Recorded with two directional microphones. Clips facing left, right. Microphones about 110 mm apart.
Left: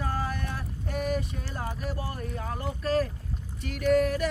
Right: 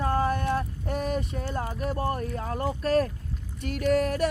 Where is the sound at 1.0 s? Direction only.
35° right (ahead or behind).